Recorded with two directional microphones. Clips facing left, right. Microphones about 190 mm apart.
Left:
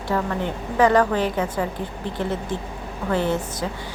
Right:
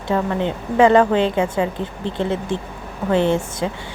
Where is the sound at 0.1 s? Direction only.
20° right (ahead or behind).